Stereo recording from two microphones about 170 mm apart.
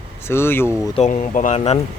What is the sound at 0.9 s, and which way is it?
Speech, 45° left (ahead or behind).